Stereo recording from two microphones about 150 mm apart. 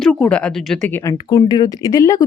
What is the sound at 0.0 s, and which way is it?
Speech, 10° left (ahead or behind).